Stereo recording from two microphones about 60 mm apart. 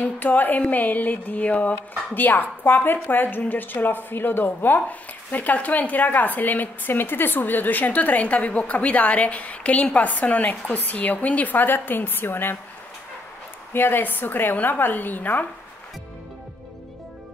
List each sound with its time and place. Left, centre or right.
0.0 s a woman's voice: left
13.7 s a woman's voice: left